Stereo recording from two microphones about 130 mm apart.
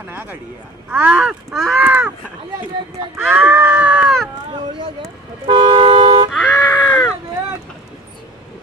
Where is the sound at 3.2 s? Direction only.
10° right (ahead or behind).